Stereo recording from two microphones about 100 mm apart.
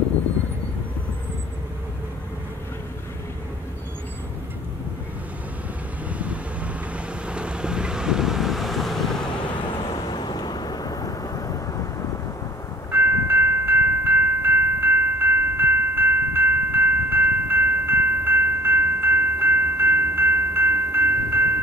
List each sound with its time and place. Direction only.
6.0 s vehicle: 15° right (ahead or behind)
9.8 s vehicle: 45° left (ahead or behind)
12.9 s train: 25° right (ahead or behind)